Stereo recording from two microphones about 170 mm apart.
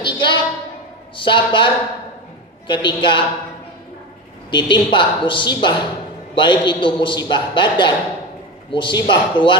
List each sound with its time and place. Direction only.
0.0 s a sound: 30° left (ahead or behind)
1.1 s a woman's voice: 30° left (ahead or behind)
2.7 s a man's voice: 25° left (ahead or behind)
4.5 s a man's voice: 25° left (ahead or behind)